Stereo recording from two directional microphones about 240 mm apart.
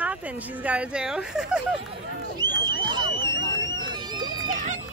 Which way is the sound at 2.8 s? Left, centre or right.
Centre.